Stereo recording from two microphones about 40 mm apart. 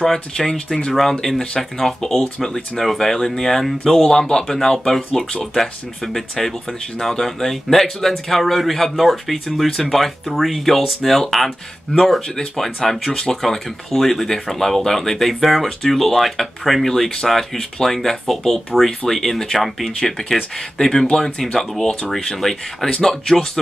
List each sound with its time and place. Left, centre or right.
0.0 s speech: centre
11.9 s speech: centre